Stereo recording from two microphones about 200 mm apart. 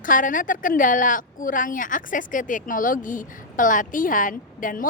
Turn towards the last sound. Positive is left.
turn(degrees=45)  # may be behind; listen again after turning